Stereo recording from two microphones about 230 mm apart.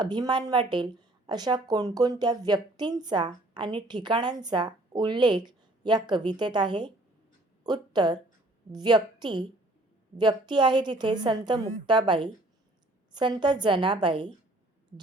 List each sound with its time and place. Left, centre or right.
0.0 s a woman's voice: centre